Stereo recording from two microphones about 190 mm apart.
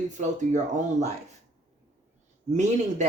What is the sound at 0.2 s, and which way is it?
Speech, 40° right (ahead or behind).